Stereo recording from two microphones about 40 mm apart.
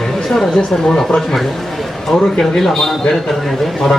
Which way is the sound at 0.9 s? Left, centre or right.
Centre.